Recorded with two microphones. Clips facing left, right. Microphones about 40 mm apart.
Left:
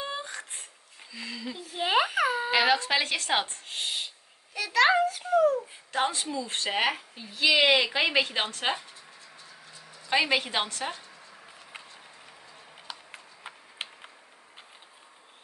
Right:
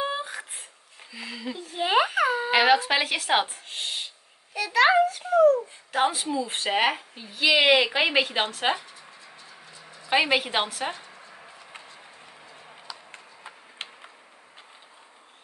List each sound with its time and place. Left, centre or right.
0.2 s a sound: centre
1.1 s a woman's voice: centre
1.6 s a sound: centre
2.5 s a child's voice: centre
5.9 s a woman's voice: centre
9.5 s bird: right
10.0 s a woman's voice: centre
12.9 s tick-tock: left